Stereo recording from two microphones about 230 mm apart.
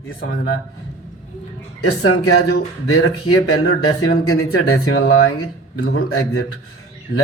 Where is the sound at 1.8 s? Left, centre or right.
Left.